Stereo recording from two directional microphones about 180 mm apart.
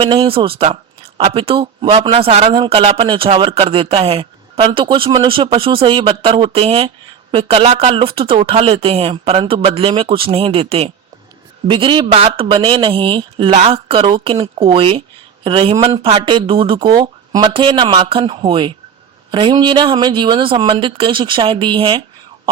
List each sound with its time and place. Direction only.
0.0 s a man's voice: 30° right (ahead or behind)